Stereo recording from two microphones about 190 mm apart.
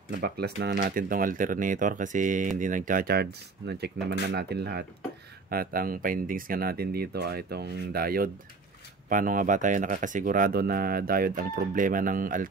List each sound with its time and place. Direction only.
0.2 s speech: 60° right (ahead or behind)